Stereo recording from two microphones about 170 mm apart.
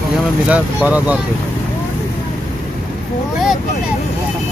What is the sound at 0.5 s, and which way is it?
Speech, 10° right (ahead or behind).